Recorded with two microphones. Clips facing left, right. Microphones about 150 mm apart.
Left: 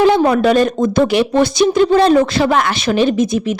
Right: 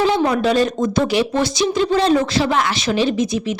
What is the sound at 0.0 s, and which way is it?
A woman's voice, 55° left (ahead or behind).